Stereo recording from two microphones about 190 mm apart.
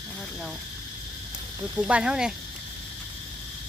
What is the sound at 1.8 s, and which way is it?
Speech, 5° right (ahead or behind).